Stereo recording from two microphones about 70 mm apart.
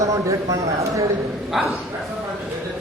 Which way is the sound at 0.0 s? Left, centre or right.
Right.